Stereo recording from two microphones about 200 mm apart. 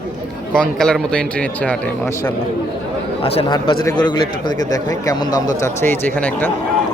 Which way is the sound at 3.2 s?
25° left (ahead or behind).